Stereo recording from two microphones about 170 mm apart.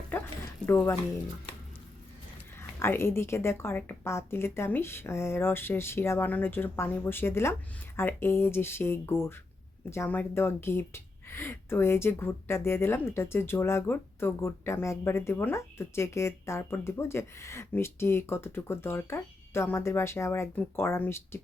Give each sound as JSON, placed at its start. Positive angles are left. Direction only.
{"t": 0.1, "sound": "a sound", "side_deg": 10}
{"t": 0.6, "sound": "speech", "side_deg": 15}
{"t": 2.6, "sound": "speech", "side_deg": 15}